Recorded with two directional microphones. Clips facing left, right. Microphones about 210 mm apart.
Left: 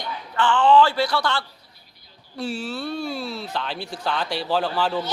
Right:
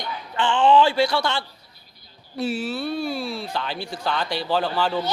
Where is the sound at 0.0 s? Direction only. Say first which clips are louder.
Left 1 dB; 20° right (ahead or behind).